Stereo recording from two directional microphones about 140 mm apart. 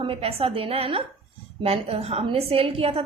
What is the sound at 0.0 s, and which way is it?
A woman's voice, 40° right (ahead or behind).